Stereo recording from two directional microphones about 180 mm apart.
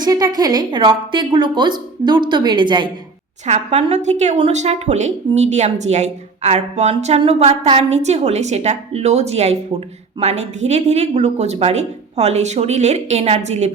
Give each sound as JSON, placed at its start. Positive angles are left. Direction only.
{"t": 0.0, "sound": "a woman's voice", "side_deg": -20}
{"t": 3.4, "sound": "speech", "side_deg": -40}